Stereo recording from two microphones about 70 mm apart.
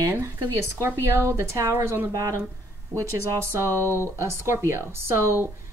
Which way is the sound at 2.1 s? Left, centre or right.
Right.